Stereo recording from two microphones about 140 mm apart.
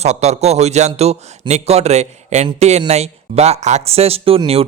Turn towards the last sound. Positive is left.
turn(degrees=-45)  # may be behind; listen again after turning